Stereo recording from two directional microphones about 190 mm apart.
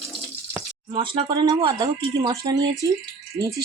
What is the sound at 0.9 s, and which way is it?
Speech, 25° right (ahead or behind).